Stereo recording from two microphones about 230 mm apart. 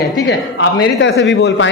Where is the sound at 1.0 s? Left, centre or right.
Left.